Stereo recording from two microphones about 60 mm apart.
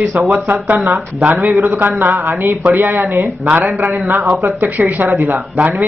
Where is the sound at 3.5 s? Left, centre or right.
Right.